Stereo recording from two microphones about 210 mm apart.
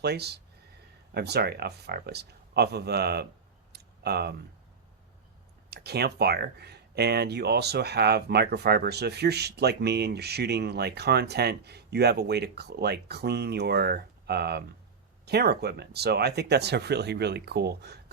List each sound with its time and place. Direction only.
0.0 s speech: 50° right (ahead or behind)
3.7 s a sound: 50° right (ahead or behind)
5.7 s speech: 50° right (ahead or behind)